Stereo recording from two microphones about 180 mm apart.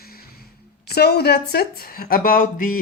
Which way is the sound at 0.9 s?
65° left (ahead or behind).